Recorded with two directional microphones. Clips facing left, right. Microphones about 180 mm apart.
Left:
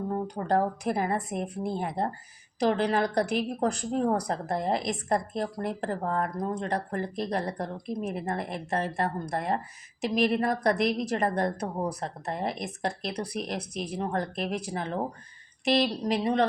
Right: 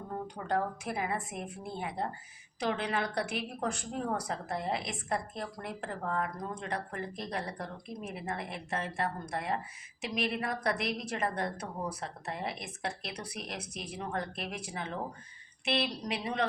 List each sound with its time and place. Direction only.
0.1 s a woman's voice: 40° left (ahead or behind)